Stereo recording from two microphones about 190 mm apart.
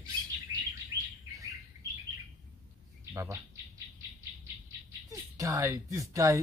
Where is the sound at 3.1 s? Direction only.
15° right (ahead or behind).